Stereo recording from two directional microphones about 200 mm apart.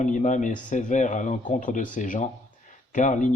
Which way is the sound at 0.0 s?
35° left (ahead or behind).